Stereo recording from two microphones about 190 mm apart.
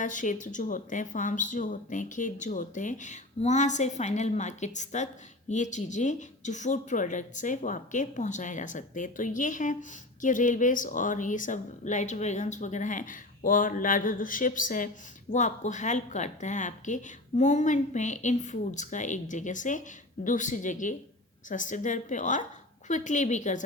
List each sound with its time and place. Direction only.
0.0 s speech: 40° left (ahead or behind)